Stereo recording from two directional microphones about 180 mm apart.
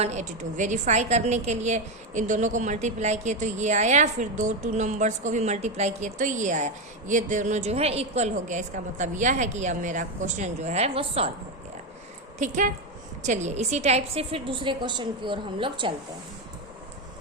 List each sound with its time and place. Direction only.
0.0 s a woman's voice: 40° right (ahead or behind)
12.4 s a woman's voice: 45° right (ahead or behind); by 15.9 s 25° right (ahead or behind)